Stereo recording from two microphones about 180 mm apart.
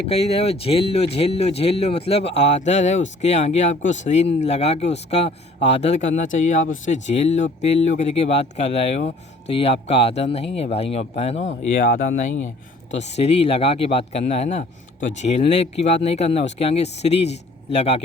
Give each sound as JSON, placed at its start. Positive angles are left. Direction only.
{"t": 0.1, "sound": "speech", "side_deg": 35}